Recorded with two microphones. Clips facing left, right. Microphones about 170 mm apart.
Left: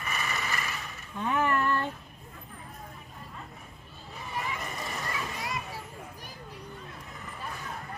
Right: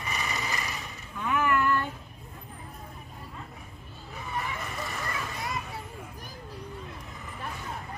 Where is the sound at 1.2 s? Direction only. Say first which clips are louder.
Right 1 dB; 35° left (ahead or behind).